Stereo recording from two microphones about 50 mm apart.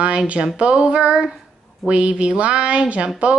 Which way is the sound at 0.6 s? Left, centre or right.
Right.